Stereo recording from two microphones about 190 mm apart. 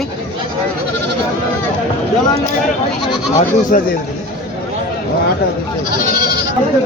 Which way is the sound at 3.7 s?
45° left (ahead or behind).